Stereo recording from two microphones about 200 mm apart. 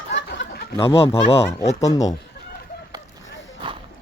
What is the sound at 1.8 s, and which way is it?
Speech, 15° left (ahead or behind).